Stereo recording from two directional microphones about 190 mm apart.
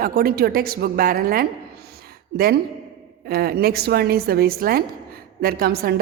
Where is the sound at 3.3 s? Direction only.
55° right (ahead or behind).